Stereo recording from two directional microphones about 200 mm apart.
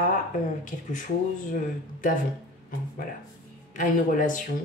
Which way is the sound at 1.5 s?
40° left (ahead or behind).